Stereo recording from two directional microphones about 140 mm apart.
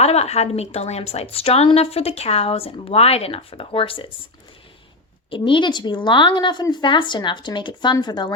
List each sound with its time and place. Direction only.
0.0 s a woman's voice: 50° left (ahead or behind)
5.3 s a woman's voice: 35° left (ahead or behind)